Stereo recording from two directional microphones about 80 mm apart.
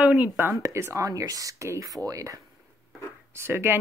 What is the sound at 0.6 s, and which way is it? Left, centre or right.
Speech, right.